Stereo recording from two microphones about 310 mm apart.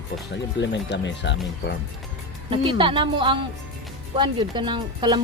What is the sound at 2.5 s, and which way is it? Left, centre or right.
Speech, centre.